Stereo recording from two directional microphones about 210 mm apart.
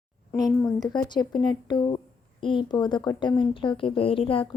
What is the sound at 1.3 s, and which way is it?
A woman's voice, 20° left (ahead or behind).